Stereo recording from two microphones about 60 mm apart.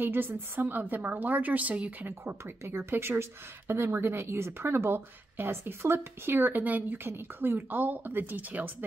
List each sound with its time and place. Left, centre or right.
0.0 s a woman's voice: right
2.4 s a woman's voice: right